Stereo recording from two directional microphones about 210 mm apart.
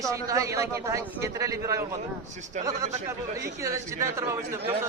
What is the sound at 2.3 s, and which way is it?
Speech, 35° right (ahead or behind).